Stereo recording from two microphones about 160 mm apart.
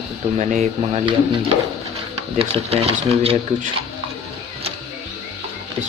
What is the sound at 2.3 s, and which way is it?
Speech, 35° right (ahead or behind).